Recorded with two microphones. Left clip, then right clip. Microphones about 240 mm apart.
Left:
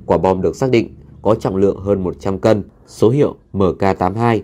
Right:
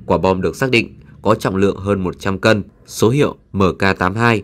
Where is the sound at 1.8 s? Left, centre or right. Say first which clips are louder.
Left 1 dB; right.